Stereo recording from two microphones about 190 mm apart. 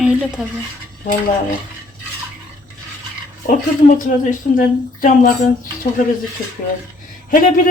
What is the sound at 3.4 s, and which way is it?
Speech, 45° left (ahead or behind).